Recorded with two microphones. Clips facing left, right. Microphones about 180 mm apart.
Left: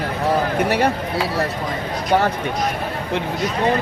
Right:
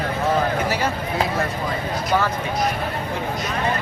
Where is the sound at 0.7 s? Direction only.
60° left (ahead or behind).